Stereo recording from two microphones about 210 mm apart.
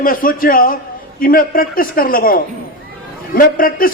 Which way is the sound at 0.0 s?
40° left (ahead or behind).